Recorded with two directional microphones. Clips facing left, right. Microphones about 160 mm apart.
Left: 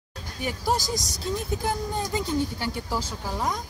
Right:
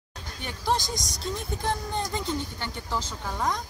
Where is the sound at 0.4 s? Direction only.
5° left (ahead or behind).